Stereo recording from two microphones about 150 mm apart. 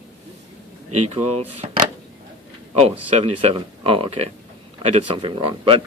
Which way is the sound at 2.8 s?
45° right (ahead or behind).